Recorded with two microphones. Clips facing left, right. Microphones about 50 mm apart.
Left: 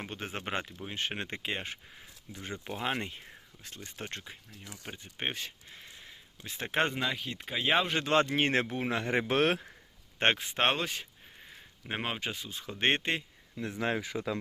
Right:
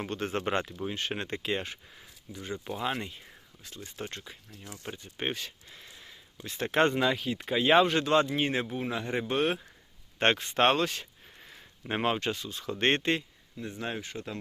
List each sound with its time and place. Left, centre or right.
0.0 s speech: centre; by 4.4 s left
4.9 s speech: centre
6.4 s speech: centre
6.8 s speech: centre
8.0 s speech: left
8.3 s speech: left
10.2 s speech: centre
11.8 s speech: centre
13.6 s speech: left
14.1 s speech: left